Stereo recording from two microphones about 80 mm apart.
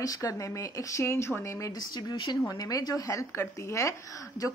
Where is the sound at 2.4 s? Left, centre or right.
Left.